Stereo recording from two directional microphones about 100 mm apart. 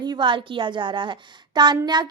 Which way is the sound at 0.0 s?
45° right (ahead or behind).